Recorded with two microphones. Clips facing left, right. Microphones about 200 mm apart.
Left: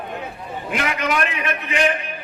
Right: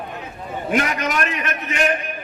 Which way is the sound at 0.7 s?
40° right (ahead or behind).